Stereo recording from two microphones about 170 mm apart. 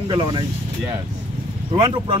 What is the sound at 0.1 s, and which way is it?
Speech, 30° right (ahead or behind).